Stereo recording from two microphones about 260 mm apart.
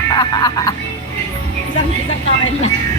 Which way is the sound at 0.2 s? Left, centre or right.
Centre.